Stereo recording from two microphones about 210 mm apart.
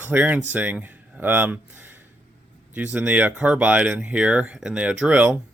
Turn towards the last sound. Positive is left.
turn(degrees=-5)  # may be behind; listen again after turning